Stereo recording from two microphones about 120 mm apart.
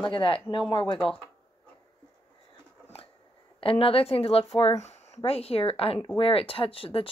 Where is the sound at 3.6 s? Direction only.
50° left (ahead or behind).